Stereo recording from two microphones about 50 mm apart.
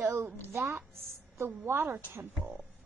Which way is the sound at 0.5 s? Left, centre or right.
Right.